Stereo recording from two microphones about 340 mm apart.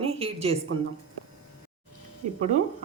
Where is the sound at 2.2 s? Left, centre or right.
Right.